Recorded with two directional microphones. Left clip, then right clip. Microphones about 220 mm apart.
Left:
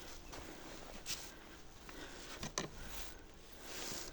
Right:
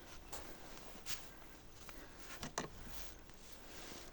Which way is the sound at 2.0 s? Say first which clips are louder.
Left 3 dB; 30° left (ahead or behind).